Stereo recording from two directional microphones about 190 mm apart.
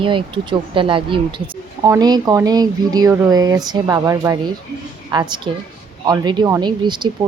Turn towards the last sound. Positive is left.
turn(degrees=-25)  # may be behind; listen again after turning